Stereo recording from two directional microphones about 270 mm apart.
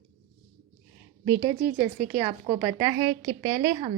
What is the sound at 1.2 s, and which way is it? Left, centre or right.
A woman's voice, centre.